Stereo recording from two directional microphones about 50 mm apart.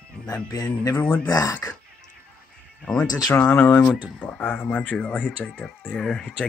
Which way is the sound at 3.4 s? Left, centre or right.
Left.